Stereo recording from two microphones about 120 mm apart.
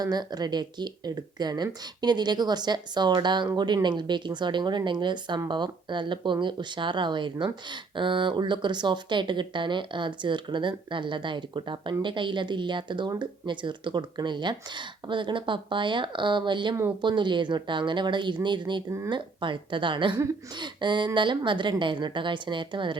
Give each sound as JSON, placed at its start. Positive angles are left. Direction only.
{"t": 0.0, "sound": "a woman's voice", "side_deg": -35}